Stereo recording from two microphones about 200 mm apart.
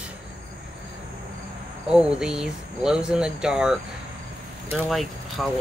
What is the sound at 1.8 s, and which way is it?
Speech, 5° right (ahead or behind).